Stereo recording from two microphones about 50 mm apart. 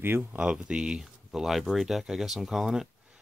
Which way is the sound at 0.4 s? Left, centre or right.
Centre.